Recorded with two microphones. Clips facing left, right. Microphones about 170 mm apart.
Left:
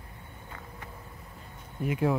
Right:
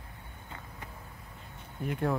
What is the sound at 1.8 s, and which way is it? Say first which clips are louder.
Speech: left 4 dB; 5° left (ahead or behind).